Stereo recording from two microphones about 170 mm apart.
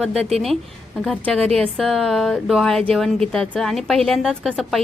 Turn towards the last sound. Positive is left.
turn(degrees=0)  # may be behind; listen again after turning